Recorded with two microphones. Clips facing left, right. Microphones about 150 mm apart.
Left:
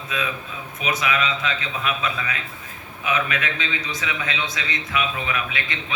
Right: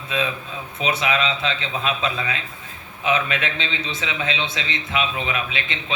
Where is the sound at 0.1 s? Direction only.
25° right (ahead or behind).